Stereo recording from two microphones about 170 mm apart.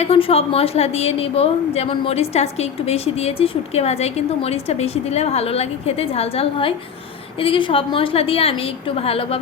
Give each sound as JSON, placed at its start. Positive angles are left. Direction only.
{"t": 0.0, "sound": "a woman's voice", "side_deg": 35}